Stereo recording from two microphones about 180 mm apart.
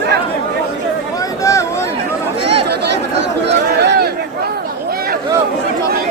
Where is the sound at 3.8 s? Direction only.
65° right (ahead or behind).